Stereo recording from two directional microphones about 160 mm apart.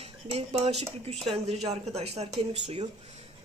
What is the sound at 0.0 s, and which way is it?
Speech, 40° right (ahead or behind).